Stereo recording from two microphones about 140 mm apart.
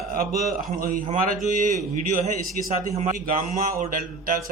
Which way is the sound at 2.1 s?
80° right.